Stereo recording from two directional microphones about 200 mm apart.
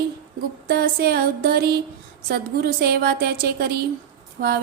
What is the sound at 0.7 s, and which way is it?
A woman's voice, 50° right (ahead or behind).